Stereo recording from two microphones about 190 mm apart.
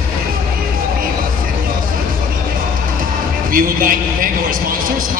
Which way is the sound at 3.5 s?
50° right (ahead or behind).